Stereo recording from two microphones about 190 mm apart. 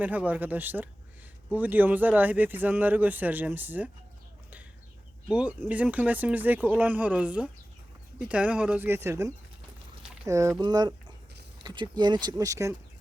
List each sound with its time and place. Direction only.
0.0 s a man's voice: 10° right (ahead or behind)
5.3 s a man's voice: 5° right (ahead or behind)